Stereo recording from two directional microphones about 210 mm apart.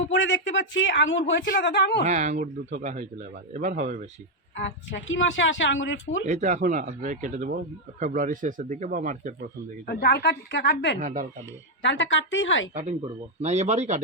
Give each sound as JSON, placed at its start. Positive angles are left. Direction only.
{"t": 0.0, "sound": "speech", "side_deg": 60}
{"t": 2.0, "sound": "speech", "side_deg": -35}
{"t": 4.5, "sound": "speech", "side_deg": 60}
{"t": 6.2, "sound": "speech", "side_deg": -35}
{"t": 9.8, "sound": "a woman's voice", "side_deg": 50}
{"t": 11.0, "sound": "speech", "side_deg": -40}
{"t": 11.8, "sound": "speech", "side_deg": 60}
{"t": 13.4, "sound": "speech", "side_deg": -35}